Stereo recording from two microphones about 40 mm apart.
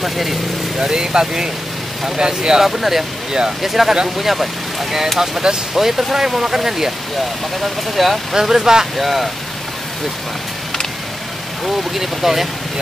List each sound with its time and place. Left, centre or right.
0.0 s speech: centre
0.7 s speech: centre
2.8 s speech: centre
11.6 s speech: centre